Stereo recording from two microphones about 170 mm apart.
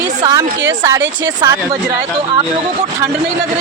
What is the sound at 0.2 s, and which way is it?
Speech, 25° right (ahead or behind).